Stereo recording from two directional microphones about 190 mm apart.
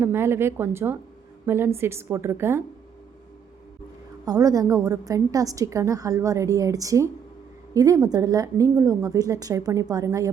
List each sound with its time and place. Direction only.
0.0 s a woman's voice: 10° right (ahead or behind)
4.3 s a woman's voice: 20° right (ahead or behind)